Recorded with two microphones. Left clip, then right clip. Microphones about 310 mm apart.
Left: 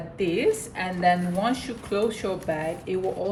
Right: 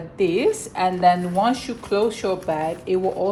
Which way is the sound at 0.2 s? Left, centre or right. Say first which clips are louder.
Right 4 dB; centre.